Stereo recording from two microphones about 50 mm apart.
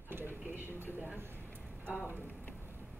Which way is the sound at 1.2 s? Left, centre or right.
Right.